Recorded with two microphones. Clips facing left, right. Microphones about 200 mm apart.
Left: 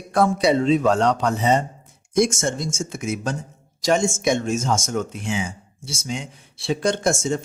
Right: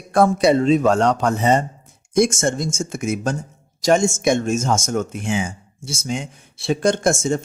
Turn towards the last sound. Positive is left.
turn(degrees=-50)  # may be behind; listen again after turning